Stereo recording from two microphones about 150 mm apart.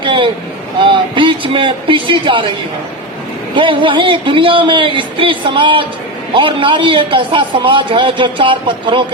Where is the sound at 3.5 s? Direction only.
35° right (ahead or behind).